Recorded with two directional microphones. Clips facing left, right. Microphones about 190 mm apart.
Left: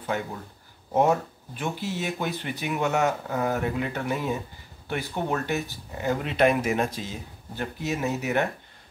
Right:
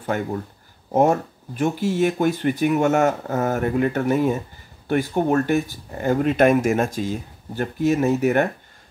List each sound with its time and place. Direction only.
0.9 s speech: 45° right (ahead or behind)